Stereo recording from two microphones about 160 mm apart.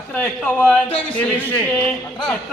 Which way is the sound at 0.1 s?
10° left (ahead or behind).